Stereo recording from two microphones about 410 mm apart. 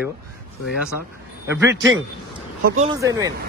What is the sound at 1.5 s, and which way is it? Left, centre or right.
Speech, centre.